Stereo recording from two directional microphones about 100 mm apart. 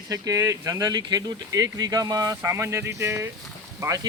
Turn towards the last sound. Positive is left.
turn(degrees=-35)  # may be behind; listen again after turning